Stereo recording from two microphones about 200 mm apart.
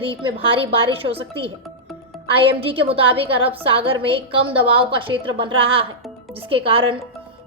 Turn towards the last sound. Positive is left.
turn(degrees=-25)  # may be behind; listen again after turning